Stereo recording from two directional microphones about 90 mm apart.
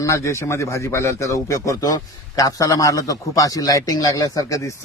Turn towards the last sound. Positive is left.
turn(degrees=45)  # may be behind; listen again after turning